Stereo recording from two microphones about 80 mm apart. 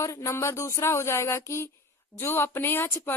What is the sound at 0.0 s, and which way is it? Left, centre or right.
Speech, left.